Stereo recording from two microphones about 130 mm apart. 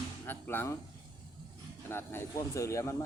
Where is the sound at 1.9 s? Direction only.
20° left (ahead or behind).